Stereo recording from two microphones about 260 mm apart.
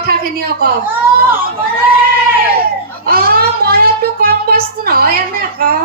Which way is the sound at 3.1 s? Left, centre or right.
Right.